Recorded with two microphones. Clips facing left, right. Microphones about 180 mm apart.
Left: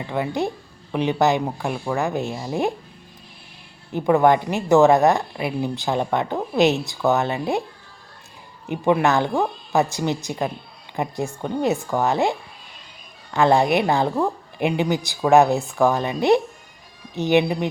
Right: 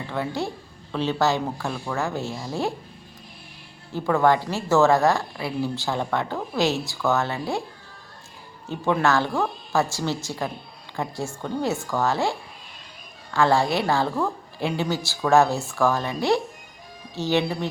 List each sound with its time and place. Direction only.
0.1 s a woman's voice: 15° left (ahead or behind)
3.9 s speech: 20° left (ahead or behind)
8.6 s a woman's voice: 15° left (ahead or behind)